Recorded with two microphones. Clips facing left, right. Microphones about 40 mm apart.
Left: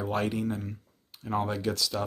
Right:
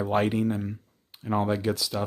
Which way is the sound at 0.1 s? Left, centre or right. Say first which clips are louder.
Right 5 dB; right.